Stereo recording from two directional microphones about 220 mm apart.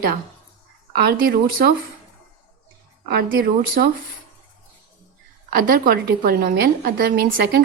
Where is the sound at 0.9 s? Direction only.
45° right (ahead or behind).